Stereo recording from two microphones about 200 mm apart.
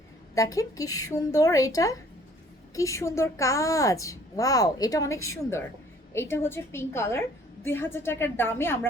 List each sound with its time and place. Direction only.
0.3 s a woman's voice: 15° left (ahead or behind)